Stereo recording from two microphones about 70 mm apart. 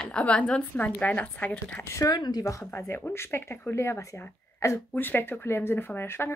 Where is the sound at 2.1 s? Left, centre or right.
Left.